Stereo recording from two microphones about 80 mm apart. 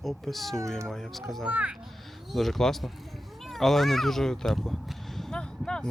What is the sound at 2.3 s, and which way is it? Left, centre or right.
Speech, centre.